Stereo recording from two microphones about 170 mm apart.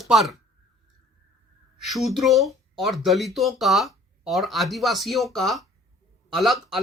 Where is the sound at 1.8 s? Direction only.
Centre (ahead or behind).